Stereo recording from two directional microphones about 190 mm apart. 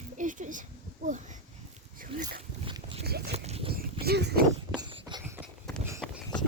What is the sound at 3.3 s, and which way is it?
Dog, 35° right (ahead or behind).